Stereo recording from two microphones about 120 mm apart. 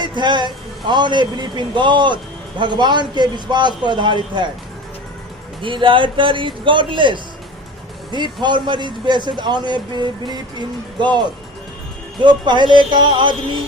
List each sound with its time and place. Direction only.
0.0 s a man's voice: 40° right (ahead or behind)
5.6 s a man's voice: 45° right (ahead or behind)
12.2 s a man's voice: 40° right (ahead or behind)